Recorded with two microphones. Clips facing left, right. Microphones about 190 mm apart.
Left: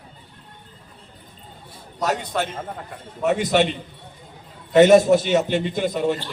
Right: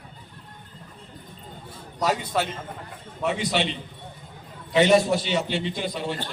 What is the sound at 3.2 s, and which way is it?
A man's voice, 50° left (ahead or behind).